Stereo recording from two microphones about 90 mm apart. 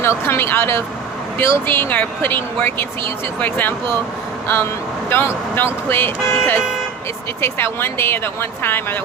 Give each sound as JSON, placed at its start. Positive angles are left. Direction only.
{"t": 0.0, "sound": "speech", "side_deg": 30}
{"t": 5.0, "sound": "speech", "side_deg": 25}